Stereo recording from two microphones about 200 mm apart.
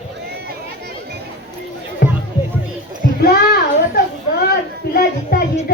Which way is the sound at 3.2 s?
50° left (ahead or behind).